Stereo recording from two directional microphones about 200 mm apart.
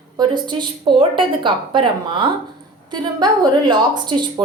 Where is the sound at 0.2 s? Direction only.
20° right (ahead or behind).